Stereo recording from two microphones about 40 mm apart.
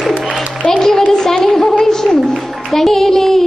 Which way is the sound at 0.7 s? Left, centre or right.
Centre.